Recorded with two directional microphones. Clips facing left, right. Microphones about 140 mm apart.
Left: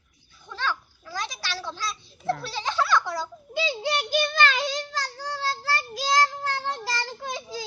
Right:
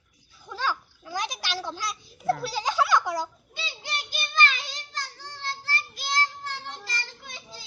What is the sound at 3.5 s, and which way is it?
Child singing, 90° left.